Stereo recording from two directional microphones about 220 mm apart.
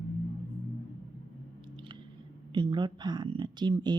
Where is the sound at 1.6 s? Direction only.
20° right (ahead or behind).